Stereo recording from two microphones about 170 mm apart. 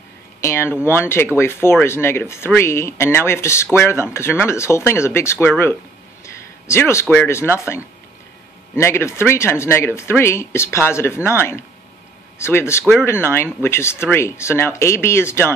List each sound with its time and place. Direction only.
0.4 s speech: 15° left (ahead or behind)